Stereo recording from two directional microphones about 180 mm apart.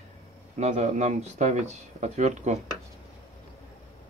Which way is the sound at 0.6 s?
40° right (ahead or behind).